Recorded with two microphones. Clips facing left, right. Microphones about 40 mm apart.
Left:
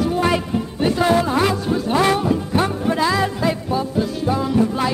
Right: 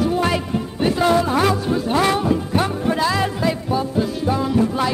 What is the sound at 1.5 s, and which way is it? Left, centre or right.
Music, centre.